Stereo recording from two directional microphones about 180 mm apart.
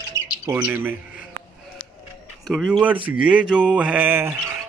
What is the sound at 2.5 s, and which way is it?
Speech, centre (ahead or behind).